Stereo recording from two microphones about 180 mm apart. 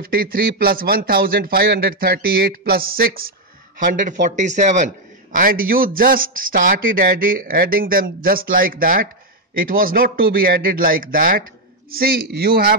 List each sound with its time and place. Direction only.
0.0 s a man's voice: 55° right (ahead or behind)